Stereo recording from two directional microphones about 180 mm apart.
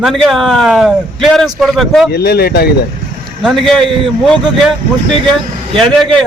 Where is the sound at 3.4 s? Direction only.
Centre (ahead or behind).